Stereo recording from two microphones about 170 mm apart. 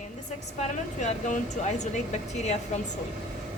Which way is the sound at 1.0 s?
45° left (ahead or behind).